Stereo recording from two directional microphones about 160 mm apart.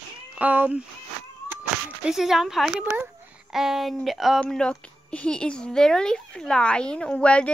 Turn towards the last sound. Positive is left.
turn(degrees=5)  # may be behind; listen again after turning